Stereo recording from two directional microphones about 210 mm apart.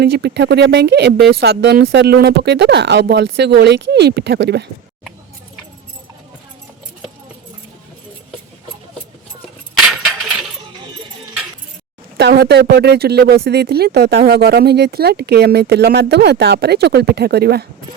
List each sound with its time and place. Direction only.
0.0 s speech: 50° right (ahead or behind)
12.1 s speech: 50° right (ahead or behind)